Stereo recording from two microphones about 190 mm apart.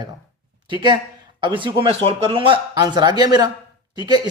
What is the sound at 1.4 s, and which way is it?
A man's voice, 25° right (ahead or behind).